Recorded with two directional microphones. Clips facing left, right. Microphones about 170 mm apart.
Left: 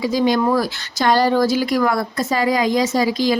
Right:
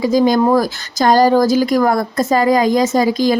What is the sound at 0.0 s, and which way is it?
Speech, 45° right (ahead or behind).